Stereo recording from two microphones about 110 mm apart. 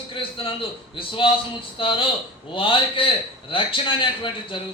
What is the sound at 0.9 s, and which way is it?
A man's voice, 50° left (ahead or behind).